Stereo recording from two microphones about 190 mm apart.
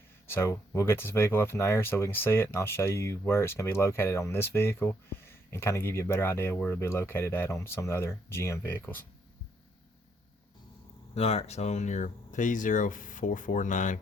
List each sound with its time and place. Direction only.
0.3 s speech: 15° left (ahead or behind)
11.1 s speech: 35° left (ahead or behind)